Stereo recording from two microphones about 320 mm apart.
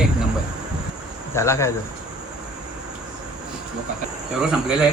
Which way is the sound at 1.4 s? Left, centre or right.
Centre.